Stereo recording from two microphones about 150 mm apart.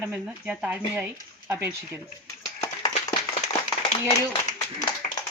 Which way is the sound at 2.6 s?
25° left (ahead or behind).